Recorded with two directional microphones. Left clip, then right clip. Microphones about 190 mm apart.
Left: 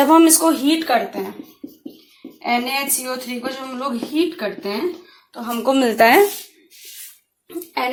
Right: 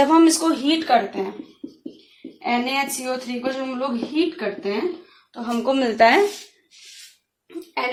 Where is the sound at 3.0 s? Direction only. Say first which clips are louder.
Even; 20° left (ahead or behind); by 6.2 s 50° left (ahead or behind).